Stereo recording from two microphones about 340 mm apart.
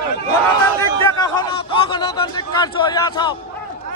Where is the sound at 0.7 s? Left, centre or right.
Centre.